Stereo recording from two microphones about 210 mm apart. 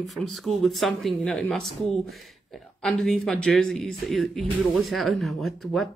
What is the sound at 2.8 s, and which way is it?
Speech, centre (ahead or behind).